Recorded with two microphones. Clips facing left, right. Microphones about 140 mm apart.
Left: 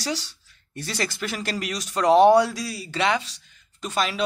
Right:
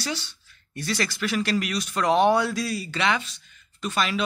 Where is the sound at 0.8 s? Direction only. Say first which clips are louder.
Right 1 dB; 30° left (ahead or behind).